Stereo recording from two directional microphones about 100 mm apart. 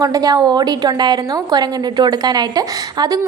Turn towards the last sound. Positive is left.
turn(degrees=-40)  # may be behind; listen again after turning